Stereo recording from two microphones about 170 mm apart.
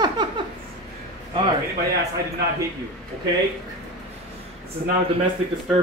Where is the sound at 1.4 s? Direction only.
30° right (ahead or behind).